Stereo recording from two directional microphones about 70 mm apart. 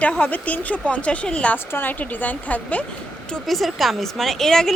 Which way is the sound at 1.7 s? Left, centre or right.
Left.